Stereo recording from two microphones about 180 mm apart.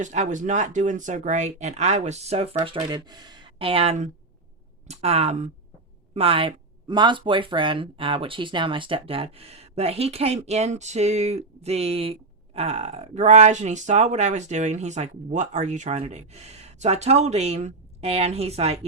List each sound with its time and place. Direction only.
0.0 s speech: 40° right (ahead or behind)